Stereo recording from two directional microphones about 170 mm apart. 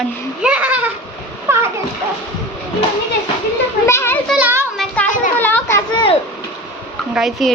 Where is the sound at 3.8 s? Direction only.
15° left (ahead or behind).